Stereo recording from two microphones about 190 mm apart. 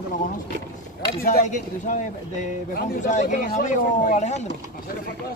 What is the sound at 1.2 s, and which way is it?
Speech, 45° left (ahead or behind).